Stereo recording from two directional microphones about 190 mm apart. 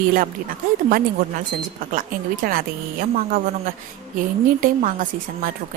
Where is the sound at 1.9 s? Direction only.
45° right (ahead or behind).